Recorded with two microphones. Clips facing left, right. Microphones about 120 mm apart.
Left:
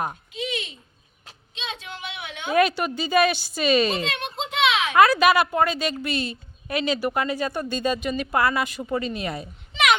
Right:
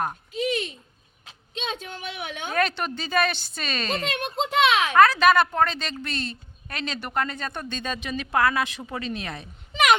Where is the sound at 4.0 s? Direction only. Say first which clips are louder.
Right 2 dB; 45° right (ahead or behind).